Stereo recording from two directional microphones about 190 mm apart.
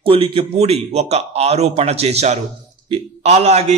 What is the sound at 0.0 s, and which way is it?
A man's voice, 30° right (ahead or behind).